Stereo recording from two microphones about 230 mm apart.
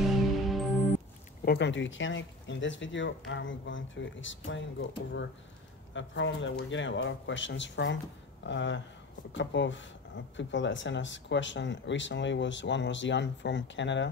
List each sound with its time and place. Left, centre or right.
0.0 s music: centre
1.4 s speech: left